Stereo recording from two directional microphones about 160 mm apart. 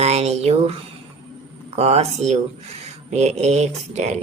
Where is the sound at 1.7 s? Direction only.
40° right (ahead or behind).